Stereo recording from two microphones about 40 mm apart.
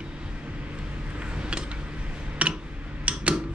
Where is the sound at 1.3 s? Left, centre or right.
Right.